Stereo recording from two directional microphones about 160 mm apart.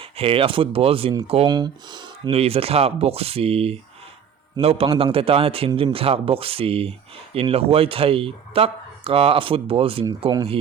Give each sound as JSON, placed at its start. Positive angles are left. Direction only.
{"t": 0.0, "sound": "speech", "side_deg": -35}
{"t": 1.5, "sound": "speech", "side_deg": -25}